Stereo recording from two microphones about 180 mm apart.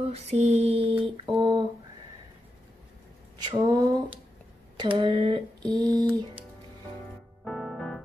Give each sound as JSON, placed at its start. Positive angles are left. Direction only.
{"t": 0.0, "sound": "mantra", "side_deg": -35}
{"t": 3.4, "sound": "a sound", "side_deg": -20}
{"t": 7.4, "sound": "keyboard", "side_deg": 0}